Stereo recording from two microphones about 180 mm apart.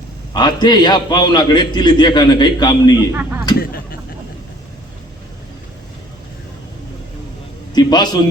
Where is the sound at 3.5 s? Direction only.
55° left (ahead or behind).